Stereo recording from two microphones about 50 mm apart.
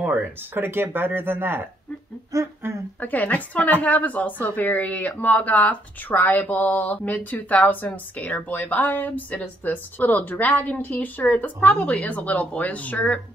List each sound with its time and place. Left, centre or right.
0.0 s speech: right
2.3 s speech: right
3.0 s speech: left
11.7 s a woman's voice: centre
12.0 s speech: left